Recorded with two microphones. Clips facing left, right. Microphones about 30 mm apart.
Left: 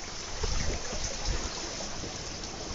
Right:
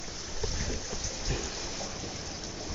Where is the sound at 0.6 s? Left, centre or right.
Centre.